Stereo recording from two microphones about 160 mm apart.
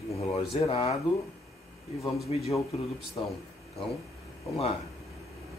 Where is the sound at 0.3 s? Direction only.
35° left (ahead or behind).